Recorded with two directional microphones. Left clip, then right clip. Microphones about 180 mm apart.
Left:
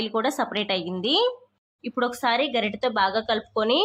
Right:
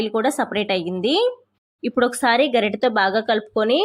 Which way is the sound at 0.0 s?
15° right (ahead or behind).